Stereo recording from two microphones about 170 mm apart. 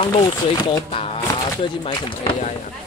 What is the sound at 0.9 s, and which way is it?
Speech, 35° left (ahead or behind).